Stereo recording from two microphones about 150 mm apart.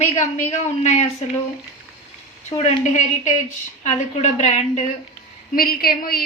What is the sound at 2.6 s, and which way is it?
Speech, 50° left (ahead or behind).